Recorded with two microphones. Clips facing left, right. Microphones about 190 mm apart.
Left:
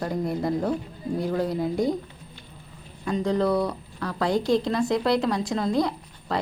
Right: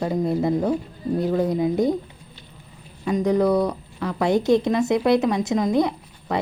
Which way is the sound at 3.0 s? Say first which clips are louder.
Right 4 dB; 15° right (ahead or behind).